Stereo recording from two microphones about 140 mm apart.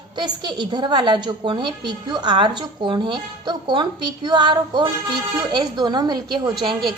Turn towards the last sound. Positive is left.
turn(degrees=-35)  # may be behind; listen again after turning